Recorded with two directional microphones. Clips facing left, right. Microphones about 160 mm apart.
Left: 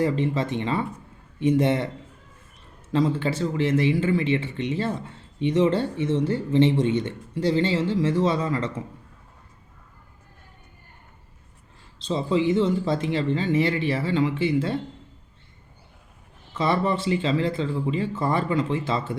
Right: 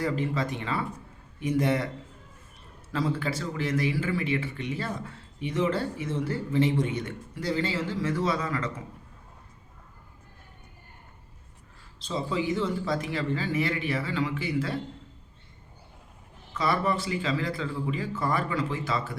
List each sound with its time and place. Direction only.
0.0 s speech: 25° left (ahead or behind)
2.9 s speech: 25° left (ahead or behind)
11.9 s speech: 25° left (ahead or behind)
16.6 s speech: 25° left (ahead or behind)